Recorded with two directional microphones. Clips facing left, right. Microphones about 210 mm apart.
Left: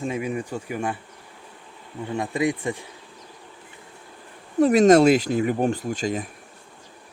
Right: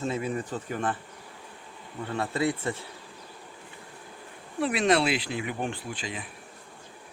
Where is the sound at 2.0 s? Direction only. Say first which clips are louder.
Left 4 dB; 15° left (ahead or behind).